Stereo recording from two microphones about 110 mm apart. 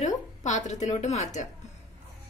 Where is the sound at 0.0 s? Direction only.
90° left.